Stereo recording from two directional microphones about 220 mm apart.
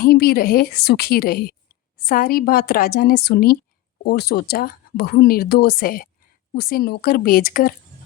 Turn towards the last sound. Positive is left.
turn(degrees=40)  # may be behind; listen again after turning